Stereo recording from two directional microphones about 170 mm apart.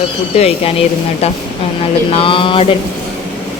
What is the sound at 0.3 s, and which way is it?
Speech, 35° left (ahead or behind).